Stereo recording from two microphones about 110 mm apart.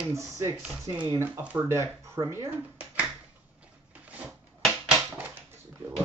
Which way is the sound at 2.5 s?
10° right (ahead or behind).